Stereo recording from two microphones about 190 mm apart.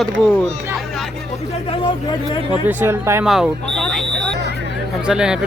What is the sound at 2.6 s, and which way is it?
Speech, 10° right (ahead or behind).